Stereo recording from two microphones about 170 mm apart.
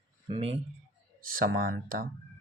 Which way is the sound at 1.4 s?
60° right (ahead or behind).